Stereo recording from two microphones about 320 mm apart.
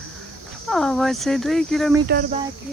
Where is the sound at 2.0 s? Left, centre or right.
Right.